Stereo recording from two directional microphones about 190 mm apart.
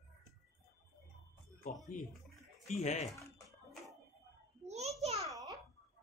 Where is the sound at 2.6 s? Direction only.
35° left (ahead or behind).